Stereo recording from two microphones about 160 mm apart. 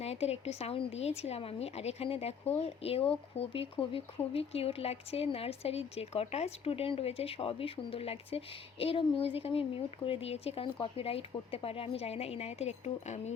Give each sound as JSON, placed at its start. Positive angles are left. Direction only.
{"t": 0.0, "sound": "speech", "side_deg": 40}